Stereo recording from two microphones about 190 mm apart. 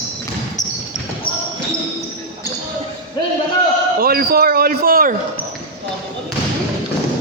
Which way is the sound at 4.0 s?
50° right (ahead or behind).